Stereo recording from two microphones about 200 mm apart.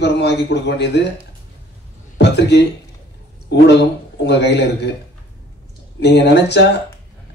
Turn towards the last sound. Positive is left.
turn(degrees=60)  # may be behind; listen again after turning